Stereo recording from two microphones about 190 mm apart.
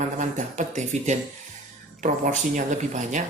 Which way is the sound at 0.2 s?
40° right (ahead or behind).